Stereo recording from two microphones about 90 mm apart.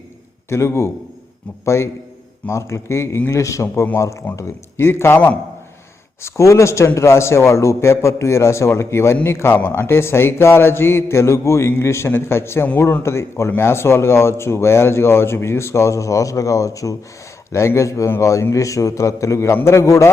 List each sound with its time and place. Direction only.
0.5 s a man's voice: 30° left (ahead or behind)